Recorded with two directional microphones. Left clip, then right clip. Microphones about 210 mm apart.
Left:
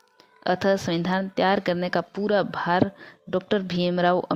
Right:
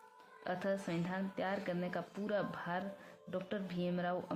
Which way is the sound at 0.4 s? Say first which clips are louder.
Left 16 dB; 40° left (ahead or behind).